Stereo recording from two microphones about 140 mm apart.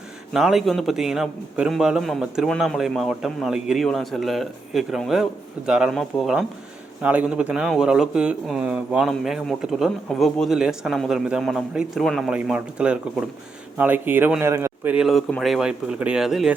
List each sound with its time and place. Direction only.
0.3 s a man's voice: centre (ahead or behind)
12.3 s a man's voice: 10° right (ahead or behind)
14.9 s a man's voice: centre (ahead or behind)